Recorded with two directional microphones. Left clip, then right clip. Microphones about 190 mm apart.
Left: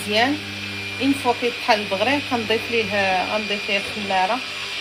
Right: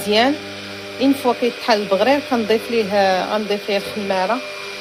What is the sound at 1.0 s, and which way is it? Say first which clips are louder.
Speech: right 4 dB; 70° right (ahead or behind).